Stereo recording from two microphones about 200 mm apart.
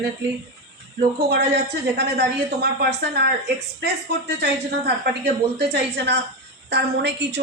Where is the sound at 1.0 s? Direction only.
55° right (ahead or behind).